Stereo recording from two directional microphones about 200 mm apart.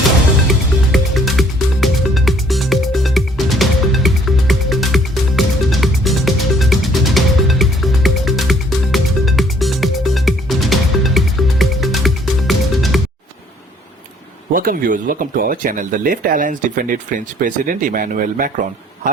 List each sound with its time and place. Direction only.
0.9 s music: centre (ahead or behind)
14.5 s speech: 45° right (ahead or behind)